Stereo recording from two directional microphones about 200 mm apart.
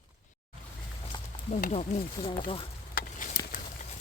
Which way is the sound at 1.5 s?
35° left (ahead or behind).